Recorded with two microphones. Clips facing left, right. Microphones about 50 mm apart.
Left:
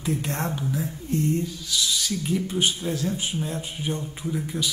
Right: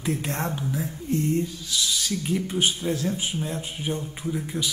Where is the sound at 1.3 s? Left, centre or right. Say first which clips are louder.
Right 1 dB; right.